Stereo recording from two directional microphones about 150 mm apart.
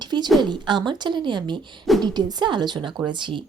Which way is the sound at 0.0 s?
30° right (ahead or behind).